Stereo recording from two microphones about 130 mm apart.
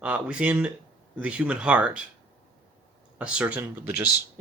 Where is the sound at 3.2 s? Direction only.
5° right (ahead or behind).